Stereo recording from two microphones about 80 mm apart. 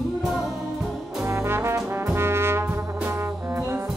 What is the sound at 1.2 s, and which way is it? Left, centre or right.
Trombone, right.